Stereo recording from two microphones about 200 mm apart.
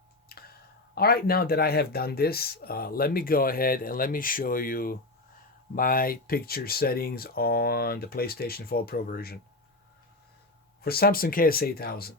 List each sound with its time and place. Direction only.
0.3 s speech: 50° left (ahead or behind)
10.8 s speech: 50° left (ahead or behind)